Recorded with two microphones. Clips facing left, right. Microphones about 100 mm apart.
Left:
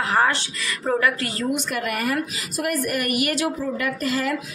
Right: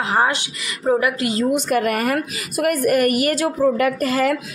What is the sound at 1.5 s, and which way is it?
A woman's voice, 45° right (ahead or behind).